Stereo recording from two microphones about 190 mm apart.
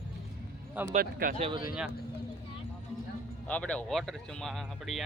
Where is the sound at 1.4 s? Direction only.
25° right (ahead or behind).